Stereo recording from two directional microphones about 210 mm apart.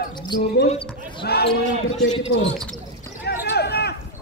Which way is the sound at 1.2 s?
50° left (ahead or behind).